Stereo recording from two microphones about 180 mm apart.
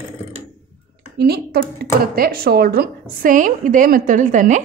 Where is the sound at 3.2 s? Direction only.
50° right (ahead or behind).